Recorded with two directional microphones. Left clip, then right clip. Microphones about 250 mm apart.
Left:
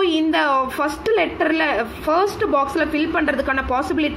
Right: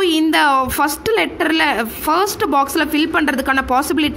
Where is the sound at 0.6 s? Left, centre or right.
Right.